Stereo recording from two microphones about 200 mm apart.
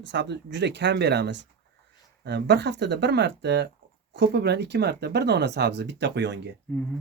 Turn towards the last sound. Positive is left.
turn(degrees=5)  # may be behind; listen again after turning